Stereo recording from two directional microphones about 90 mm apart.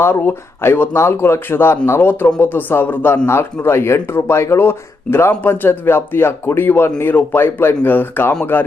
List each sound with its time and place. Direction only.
0.0 s speech: 25° left (ahead or behind)